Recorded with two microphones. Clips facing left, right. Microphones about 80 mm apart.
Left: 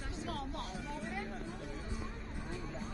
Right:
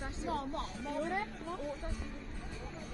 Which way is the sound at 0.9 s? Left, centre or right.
Right.